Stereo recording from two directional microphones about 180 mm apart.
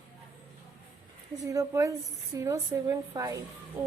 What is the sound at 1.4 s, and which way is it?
A woman's voice, 15° right (ahead or behind).